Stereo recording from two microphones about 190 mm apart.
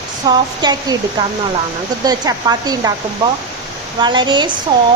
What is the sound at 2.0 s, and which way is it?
Speech, 20° right (ahead or behind).